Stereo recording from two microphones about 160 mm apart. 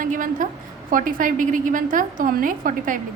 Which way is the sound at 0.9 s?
60° right (ahead or behind).